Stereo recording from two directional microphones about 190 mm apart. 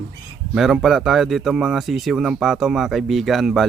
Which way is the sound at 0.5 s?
Centre (ahead or behind).